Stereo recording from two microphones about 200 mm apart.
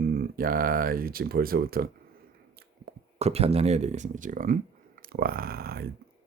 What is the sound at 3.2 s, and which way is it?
Speech, 30° right (ahead or behind).